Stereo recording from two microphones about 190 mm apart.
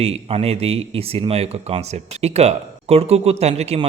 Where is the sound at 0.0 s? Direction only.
30° right (ahead or behind).